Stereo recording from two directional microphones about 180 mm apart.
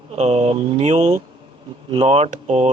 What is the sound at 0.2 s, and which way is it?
Speech, 35° right (ahead or behind).